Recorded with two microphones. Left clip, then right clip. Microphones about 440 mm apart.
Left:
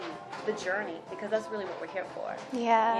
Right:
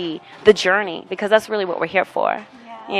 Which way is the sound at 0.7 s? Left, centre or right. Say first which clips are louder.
Right 14 dB; right.